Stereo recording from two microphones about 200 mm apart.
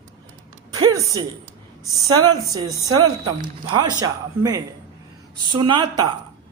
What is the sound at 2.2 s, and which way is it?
Speech, 20° right (ahead or behind).